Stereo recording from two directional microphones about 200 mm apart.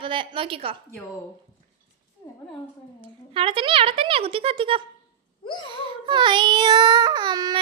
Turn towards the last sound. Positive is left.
turn(degrees=-20)  # may be behind; listen again after turning